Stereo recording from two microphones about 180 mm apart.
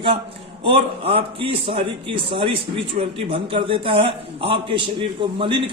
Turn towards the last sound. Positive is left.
turn(degrees=-25)  # may be behind; listen again after turning